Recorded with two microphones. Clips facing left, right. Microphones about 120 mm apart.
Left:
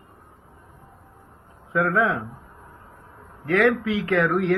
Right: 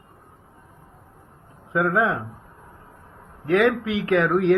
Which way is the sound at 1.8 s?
15° right (ahead or behind).